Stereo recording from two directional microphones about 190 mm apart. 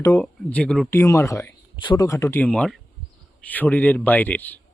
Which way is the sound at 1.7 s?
25° left (ahead or behind).